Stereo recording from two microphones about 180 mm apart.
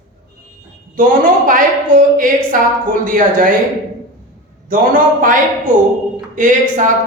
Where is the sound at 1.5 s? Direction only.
50° right (ahead or behind).